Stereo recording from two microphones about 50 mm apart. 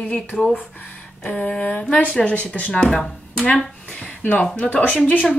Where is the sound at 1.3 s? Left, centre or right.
Left.